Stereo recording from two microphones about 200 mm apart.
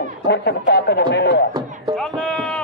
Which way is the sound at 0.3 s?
55° left (ahead or behind).